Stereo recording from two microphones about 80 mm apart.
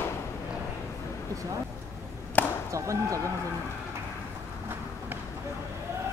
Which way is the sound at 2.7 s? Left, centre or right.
Right.